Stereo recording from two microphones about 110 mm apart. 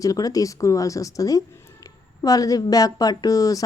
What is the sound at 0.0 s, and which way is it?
A woman's voice, 35° left (ahead or behind).